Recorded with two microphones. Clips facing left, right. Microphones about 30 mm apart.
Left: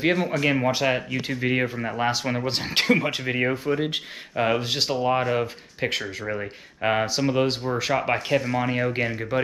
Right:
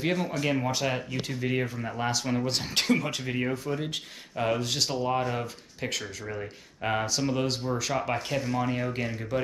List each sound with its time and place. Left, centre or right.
0.0 s speech: left